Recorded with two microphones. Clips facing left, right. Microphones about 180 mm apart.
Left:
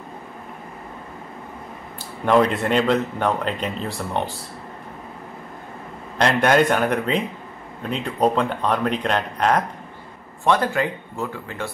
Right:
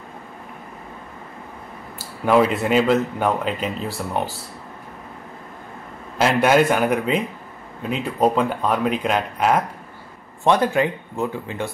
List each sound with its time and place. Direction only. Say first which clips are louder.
2.0 s speech: right 1 dB; 5° right (ahead or behind)
6.1 s speech: right 1 dB; 5° right (ahead or behind)
10.4 s speech: right 2 dB; 20° right (ahead or behind)